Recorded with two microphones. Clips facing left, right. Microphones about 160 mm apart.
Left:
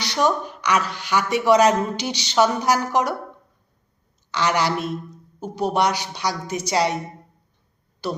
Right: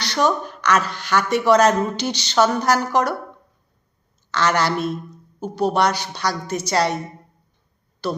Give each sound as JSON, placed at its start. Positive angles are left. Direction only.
{"t": 0.0, "sound": "speech", "side_deg": 15}
{"t": 4.3, "sound": "speech", "side_deg": 15}